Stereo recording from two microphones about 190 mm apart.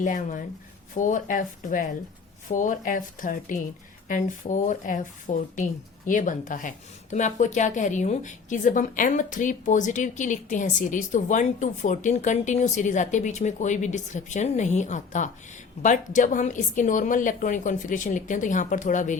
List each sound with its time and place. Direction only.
0.0 s speech: 40° left (ahead or behind)